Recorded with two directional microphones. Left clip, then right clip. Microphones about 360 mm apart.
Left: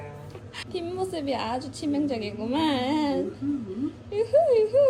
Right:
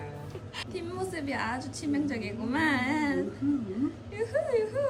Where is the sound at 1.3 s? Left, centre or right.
Left.